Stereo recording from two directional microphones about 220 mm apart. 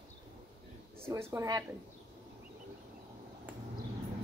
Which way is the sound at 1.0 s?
15° right (ahead or behind).